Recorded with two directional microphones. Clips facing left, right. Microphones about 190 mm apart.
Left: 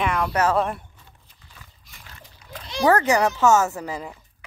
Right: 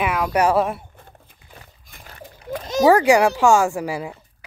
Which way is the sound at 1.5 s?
50° right (ahead or behind).